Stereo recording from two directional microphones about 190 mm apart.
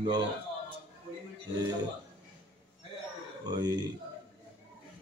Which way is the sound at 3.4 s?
20° right (ahead or behind).